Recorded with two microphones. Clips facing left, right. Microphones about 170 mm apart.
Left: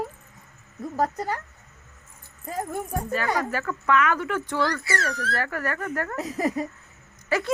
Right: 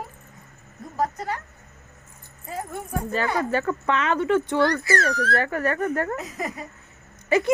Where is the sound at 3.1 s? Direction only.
25° right (ahead or behind).